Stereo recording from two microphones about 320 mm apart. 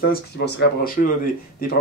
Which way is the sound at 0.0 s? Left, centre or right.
Left.